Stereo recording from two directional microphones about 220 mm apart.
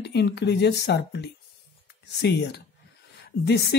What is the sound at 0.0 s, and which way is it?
Speech, 50° left (ahead or behind).